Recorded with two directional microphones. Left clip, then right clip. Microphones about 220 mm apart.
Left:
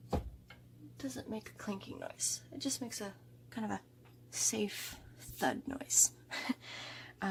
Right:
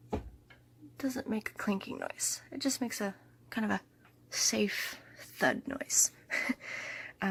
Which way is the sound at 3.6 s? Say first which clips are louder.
Right 7 dB; 20° right (ahead or behind).